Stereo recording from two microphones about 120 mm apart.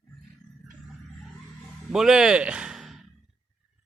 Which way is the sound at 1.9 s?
5° right (ahead or behind).